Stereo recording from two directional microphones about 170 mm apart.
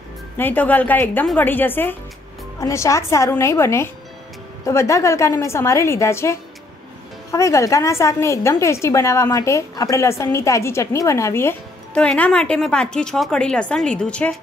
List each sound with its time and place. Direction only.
0.4 s a woman's voice: 10° left (ahead or behind)